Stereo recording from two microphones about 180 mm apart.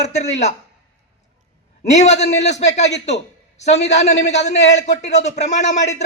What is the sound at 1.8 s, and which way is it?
Speech, 40° left (ahead or behind).